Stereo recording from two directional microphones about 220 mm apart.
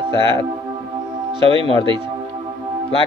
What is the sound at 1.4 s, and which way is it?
Speech, 25° right (ahead or behind).